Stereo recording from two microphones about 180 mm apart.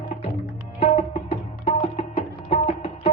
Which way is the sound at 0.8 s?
35° left (ahead or behind).